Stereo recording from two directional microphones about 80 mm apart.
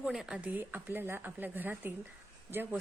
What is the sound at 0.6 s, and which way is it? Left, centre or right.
A woman's voice, right.